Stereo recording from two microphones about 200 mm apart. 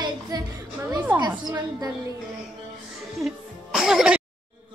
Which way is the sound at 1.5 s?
15° right (ahead or behind).